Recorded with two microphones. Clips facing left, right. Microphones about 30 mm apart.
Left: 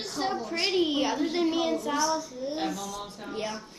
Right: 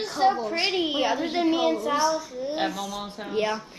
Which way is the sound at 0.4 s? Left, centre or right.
Centre.